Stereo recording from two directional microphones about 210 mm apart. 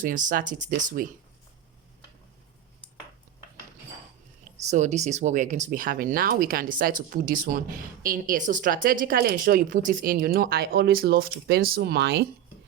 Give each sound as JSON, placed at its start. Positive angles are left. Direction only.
{"t": 0.0, "sound": "speech", "side_deg": -40}
{"t": 4.5, "sound": "speech", "side_deg": -35}